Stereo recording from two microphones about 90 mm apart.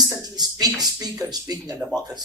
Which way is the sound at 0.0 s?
45° right (ahead or behind).